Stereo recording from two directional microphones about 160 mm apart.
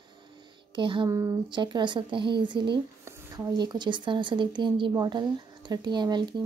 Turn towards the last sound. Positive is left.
turn(degrees=-25)  # may be behind; listen again after turning